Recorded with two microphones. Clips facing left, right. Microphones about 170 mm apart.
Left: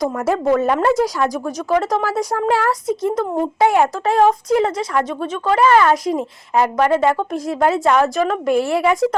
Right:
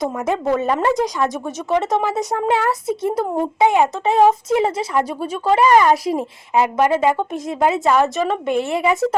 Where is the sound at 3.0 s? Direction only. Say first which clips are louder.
Even; 30° right (ahead or behind).